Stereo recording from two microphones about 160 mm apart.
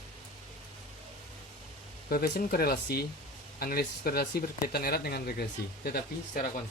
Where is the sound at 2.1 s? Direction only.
70° left (ahead or behind).